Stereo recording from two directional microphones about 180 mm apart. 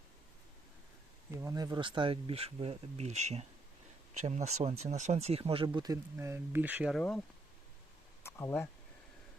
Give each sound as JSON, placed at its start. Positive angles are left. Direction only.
{"t": 1.4, "sound": "speech", "side_deg": -20}
{"t": 6.9, "sound": "speech", "side_deg": 5}
{"t": 8.2, "sound": "speech", "side_deg": 10}